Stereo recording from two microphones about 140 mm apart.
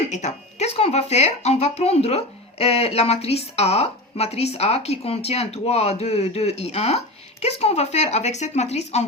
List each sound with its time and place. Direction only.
0.1 s speech: 55° left (ahead or behind)